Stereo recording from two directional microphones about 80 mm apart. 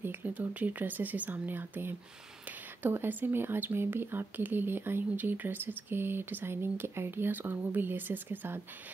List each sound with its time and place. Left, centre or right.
0.0 s speech: right